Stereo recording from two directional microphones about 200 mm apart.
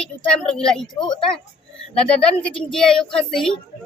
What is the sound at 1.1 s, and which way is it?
Speech, 25° left (ahead or behind).